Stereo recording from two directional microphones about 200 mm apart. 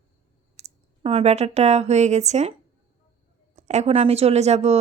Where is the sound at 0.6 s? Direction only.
30° right (ahead or behind).